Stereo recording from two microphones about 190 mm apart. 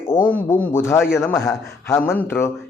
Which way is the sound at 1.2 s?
10° left (ahead or behind).